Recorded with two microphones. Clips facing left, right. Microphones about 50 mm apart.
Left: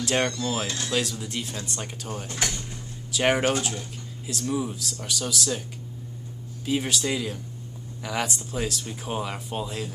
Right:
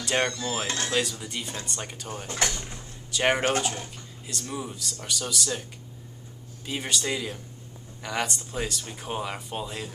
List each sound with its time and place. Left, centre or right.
0.0 s speech: centre
0.7 s speech: right
0.9 s speech: centre
6.6 s speech: centre